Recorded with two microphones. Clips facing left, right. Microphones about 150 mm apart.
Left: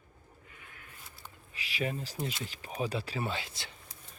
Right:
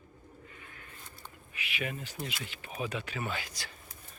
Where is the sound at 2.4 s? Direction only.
35° left (ahead or behind).